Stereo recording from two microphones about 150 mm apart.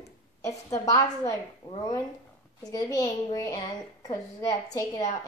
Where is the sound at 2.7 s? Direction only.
20° left (ahead or behind).